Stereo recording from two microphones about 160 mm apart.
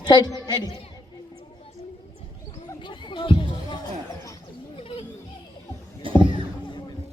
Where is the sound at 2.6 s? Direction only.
30° left (ahead or behind).